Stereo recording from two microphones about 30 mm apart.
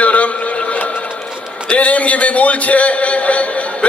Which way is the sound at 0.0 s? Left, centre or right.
Left.